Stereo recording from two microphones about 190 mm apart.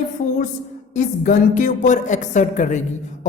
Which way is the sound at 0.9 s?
40° left (ahead or behind).